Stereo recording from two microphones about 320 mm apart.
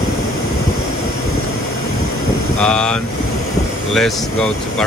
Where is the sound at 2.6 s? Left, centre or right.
Centre.